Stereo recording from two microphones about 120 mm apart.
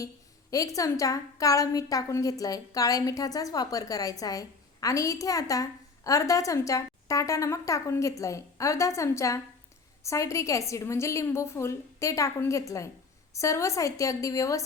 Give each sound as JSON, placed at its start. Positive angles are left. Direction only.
{"t": 0.5, "sound": "a woman's voice", "side_deg": 30}